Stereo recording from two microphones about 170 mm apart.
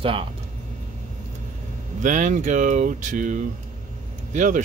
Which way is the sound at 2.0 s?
50° right (ahead or behind).